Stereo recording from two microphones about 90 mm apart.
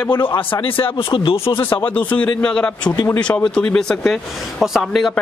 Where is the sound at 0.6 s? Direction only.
80° left.